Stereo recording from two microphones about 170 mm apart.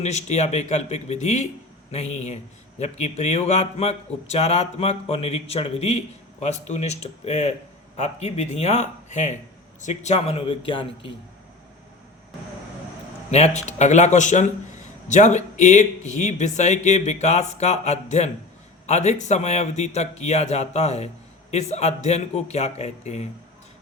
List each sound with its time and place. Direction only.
0.0 s a man's voice: 40° left (ahead or behind)
13.3 s a man's voice: 40° left (ahead or behind)